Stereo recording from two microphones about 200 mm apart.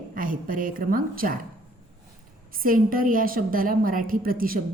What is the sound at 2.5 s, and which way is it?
A woman's voice, 45° right (ahead or behind).